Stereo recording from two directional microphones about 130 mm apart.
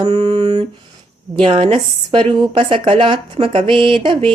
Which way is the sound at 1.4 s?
45° right (ahead or behind).